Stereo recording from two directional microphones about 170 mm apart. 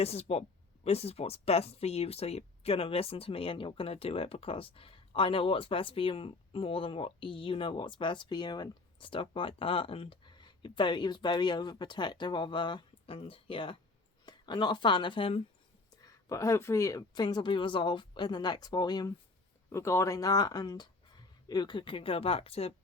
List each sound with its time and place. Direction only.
0.0 s speech: 35° left (ahead or behind)
16.0 s speech: 20° left (ahead or behind); by 22.7 s 35° left (ahead or behind)